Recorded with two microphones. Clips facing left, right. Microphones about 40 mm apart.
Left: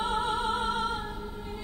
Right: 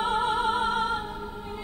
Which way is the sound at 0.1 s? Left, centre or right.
Centre.